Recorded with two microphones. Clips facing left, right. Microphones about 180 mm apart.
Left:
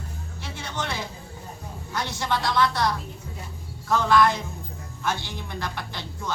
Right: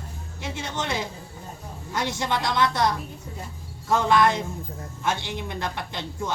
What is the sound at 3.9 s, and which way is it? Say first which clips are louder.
A woman's voice: even; 20° right (ahead or behind).